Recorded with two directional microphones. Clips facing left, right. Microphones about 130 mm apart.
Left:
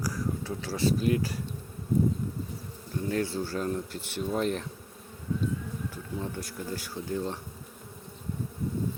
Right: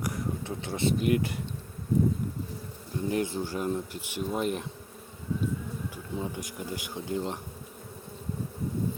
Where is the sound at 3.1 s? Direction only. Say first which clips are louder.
Even; 15° right (ahead or behind).